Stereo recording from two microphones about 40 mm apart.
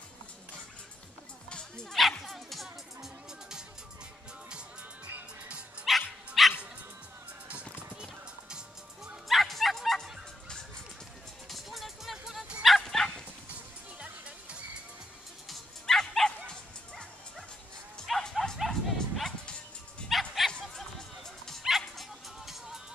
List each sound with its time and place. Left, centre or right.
1.5 s bow-wow: left
1.9 s music: centre
5.9 s dog: centre
8.0 s music: centre
9.3 s bow-wow: centre
11.4 s music: centre
12.6 s bow-wow: centre
13.5 s music: right
15.4 s dog: centre
16.0 s bow-wow: centre
18.0 s bow-wow: centre
18.4 s bow-wow: centre
20.1 s music: centre